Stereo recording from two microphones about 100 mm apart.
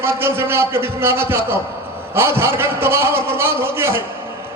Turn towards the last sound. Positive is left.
turn(degrees=-25)  # may be behind; listen again after turning